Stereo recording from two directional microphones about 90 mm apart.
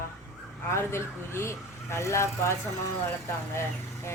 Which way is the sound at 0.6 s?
30° left (ahead or behind).